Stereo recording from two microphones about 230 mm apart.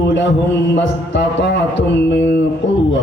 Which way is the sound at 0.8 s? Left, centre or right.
Left.